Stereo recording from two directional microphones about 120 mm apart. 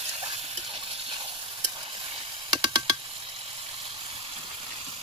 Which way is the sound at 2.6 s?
35° right (ahead or behind).